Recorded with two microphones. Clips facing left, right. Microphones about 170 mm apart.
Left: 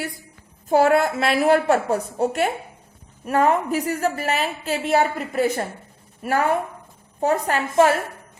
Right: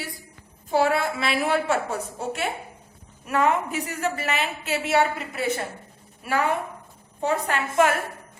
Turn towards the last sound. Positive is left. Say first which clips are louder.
# left 4 dB
turn(degrees=35)  # may be behind; listen again after turning